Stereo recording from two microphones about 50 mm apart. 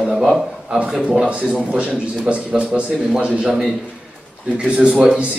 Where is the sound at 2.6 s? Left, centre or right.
Right.